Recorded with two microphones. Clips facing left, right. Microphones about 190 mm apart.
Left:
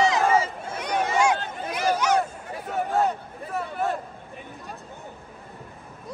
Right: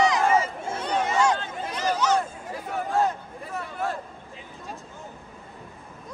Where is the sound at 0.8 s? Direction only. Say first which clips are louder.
Left 1 dB; 10° left (ahead or behind).